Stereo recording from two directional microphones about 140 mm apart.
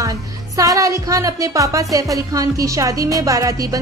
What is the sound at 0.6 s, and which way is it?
A woman's voice, 25° right (ahead or behind).